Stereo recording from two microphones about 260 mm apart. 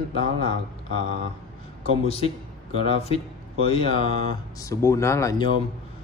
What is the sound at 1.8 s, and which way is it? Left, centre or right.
Speech, left.